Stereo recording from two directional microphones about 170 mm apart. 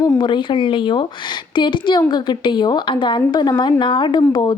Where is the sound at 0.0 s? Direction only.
25° left (ahead or behind).